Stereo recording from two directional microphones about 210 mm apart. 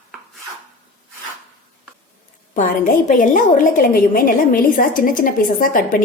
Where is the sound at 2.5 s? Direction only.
40° left (ahead or behind).